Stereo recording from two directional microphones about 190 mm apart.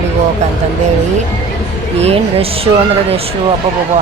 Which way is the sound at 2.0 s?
30° right (ahead or behind).